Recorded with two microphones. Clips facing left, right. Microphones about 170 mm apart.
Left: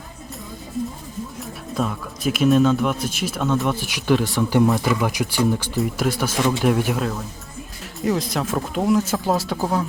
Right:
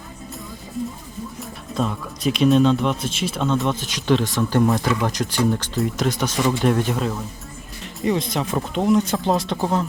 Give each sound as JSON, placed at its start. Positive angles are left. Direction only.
{"t": 1.4, "sound": "speech", "side_deg": 5}